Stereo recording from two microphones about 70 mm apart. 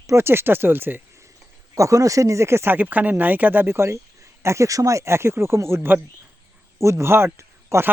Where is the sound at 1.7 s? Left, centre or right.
Right.